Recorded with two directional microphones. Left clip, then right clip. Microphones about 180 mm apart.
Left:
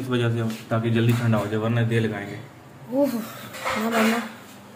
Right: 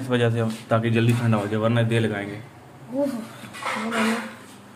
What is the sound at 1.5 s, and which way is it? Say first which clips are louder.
Speech: right 2 dB; 50° right (ahead or behind).